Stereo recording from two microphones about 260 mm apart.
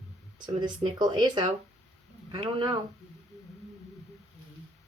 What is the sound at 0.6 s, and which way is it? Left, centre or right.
Speech, centre.